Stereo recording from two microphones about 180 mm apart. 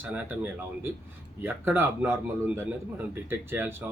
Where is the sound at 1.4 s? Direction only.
10° right (ahead or behind).